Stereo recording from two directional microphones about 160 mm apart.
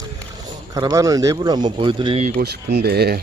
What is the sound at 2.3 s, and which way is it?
Speech, 90° right.